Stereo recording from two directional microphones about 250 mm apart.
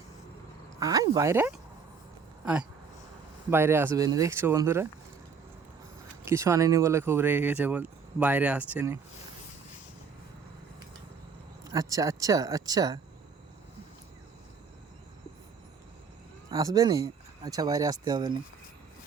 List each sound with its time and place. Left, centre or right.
0.8 s speech: centre
6.2 s speech: centre
11.7 s speech: centre
16.5 s speech: centre